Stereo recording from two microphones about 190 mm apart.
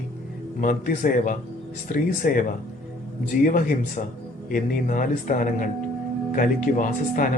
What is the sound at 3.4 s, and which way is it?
Speech, 45° left (ahead or behind).